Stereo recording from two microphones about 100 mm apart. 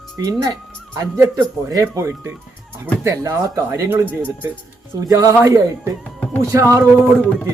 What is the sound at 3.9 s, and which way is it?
Speech, 20° right (ahead or behind).